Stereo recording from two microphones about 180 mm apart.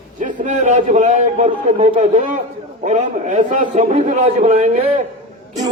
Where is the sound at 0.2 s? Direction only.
45° right (ahead or behind).